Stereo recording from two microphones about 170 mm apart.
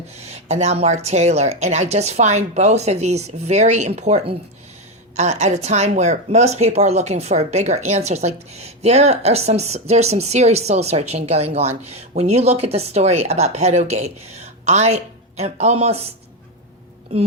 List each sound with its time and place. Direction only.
0.2 s speech: 40° right (ahead or behind)